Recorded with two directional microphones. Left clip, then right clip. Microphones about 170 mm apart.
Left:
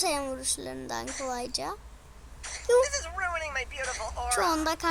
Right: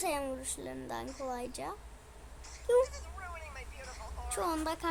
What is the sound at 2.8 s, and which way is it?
Speech, 55° left (ahead or behind).